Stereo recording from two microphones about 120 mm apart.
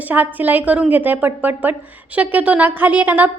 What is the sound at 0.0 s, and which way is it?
A woman's voice, 15° right (ahead or behind).